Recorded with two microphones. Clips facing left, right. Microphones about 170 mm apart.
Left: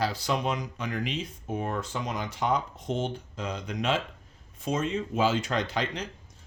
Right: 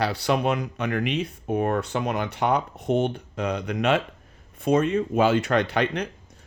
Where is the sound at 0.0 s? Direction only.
65° right (ahead or behind).